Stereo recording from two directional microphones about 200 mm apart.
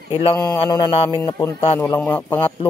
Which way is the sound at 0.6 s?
25° left (ahead or behind).